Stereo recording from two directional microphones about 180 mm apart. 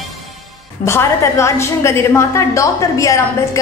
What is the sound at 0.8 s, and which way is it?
A woman's voice, 15° left (ahead or behind).